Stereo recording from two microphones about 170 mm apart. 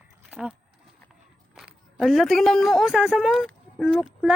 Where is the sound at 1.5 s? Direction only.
Centre (ahead or behind).